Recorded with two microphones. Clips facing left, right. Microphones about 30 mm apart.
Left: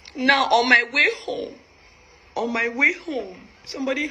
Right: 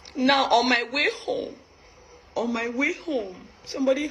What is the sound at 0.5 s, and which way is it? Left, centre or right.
A woman's voice, centre.